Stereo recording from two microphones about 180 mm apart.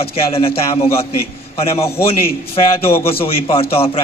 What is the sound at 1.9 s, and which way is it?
Speech, 60° left (ahead or behind).